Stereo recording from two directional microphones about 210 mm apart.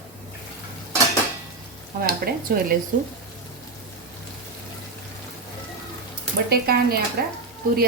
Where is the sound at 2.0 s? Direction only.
45° right (ahead or behind).